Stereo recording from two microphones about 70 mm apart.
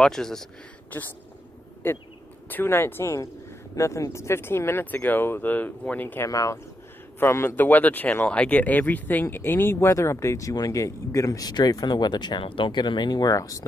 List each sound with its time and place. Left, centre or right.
0.0 s speech: centre
0.8 s speech: left
6.2 s speech: left
7.2 s speech: left